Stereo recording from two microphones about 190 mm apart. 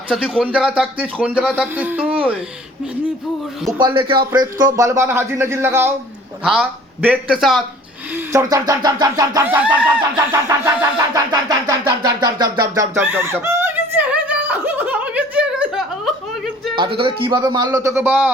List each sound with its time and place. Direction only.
0.1 s speech: 5° right (ahead or behind)
3.7 s a man's voice: 20° right (ahead or behind)
4.4 s music: 20° right (ahead or behind)
6.4 s speech: 5° right (ahead or behind)
8.1 s music: 15° right (ahead or behind)
11.1 s a sound: 20° right (ahead or behind); by 16.1 s 5° right (ahead or behind)
16.7 s a man's voice: 25° right (ahead or behind); by 18.3 s 10° right (ahead or behind)